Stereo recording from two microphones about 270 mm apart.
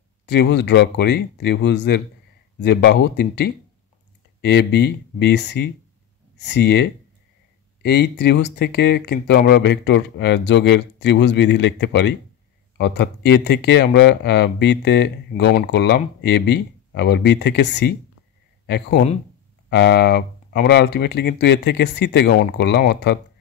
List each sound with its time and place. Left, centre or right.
0.3 s speech: left